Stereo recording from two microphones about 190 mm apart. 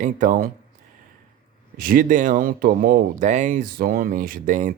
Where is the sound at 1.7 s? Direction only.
50° right (ahead or behind).